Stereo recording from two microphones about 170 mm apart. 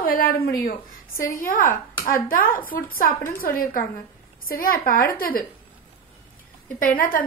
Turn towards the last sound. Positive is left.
turn(degrees=55)  # may be behind; listen again after turning